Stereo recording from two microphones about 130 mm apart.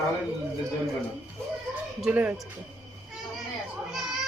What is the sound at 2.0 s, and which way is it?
Speech, 10° right (ahead or behind).